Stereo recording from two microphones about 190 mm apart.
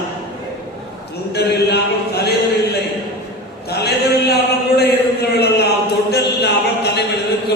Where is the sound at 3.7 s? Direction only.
60° left (ahead or behind).